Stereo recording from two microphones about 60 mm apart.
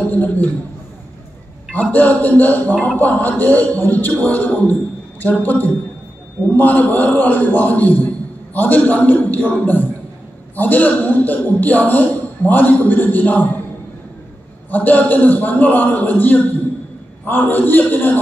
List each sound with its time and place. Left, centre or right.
0.1 s a man's voice: left
1.7 s a man's voice: left
14.7 s a man's voice: left